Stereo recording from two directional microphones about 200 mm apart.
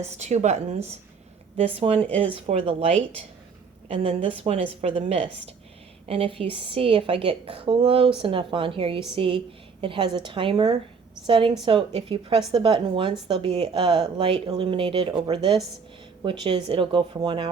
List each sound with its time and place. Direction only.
0.2 s a woman's voice: 35° right (ahead or behind)